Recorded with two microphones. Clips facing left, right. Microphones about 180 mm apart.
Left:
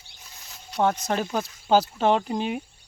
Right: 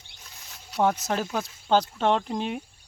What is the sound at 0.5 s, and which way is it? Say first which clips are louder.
Speech: even; 5° right (ahead or behind).